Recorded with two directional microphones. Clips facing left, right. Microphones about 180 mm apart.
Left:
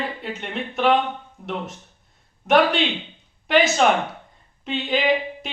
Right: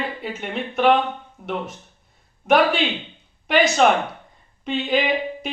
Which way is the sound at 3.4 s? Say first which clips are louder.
Right 1 dB; centre (ahead or behind).